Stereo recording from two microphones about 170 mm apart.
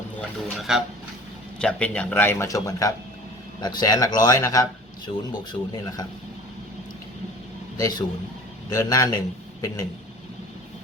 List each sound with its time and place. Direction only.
0.2 s speech: centre (ahead or behind); by 6.1 s 25° left (ahead or behind)
7.8 s a man's voice: 25° left (ahead or behind)